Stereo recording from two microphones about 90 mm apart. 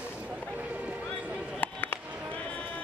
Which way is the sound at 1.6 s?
20° left (ahead or behind).